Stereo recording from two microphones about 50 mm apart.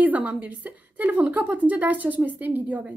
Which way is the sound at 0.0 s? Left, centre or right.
Right.